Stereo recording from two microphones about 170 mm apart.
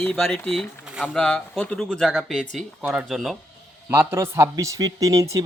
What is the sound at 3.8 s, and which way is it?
Speech, 15° right (ahead or behind).